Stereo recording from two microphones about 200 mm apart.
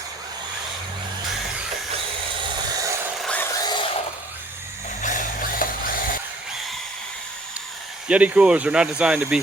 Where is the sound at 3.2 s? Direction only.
5° left (ahead or behind).